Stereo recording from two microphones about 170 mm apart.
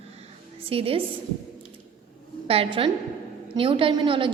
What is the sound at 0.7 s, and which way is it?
Speech, 35° right (ahead or behind).